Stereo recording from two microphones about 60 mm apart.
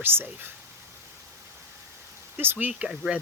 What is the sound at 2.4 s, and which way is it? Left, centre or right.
Speech, right.